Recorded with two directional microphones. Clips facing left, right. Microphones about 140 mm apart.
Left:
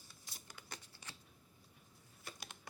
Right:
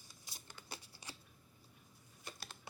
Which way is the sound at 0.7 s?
10° right (ahead or behind).